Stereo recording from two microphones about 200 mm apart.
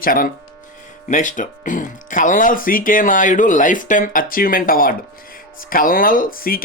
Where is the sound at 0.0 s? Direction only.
45° left (ahead or behind).